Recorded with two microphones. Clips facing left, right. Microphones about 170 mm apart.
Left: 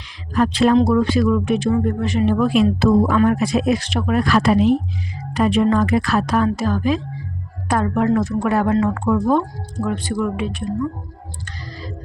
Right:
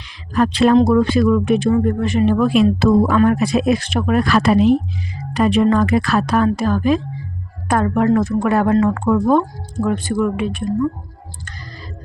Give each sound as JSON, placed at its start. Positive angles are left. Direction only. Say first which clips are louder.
{"t": 0.3, "sound": "speech", "louder": "right 2 dB", "side_deg": -65}
{"t": 0.8, "sound": "speech", "louder": "right 2 dB", "side_deg": -55}